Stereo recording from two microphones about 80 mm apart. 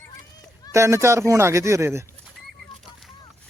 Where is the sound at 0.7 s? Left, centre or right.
Right.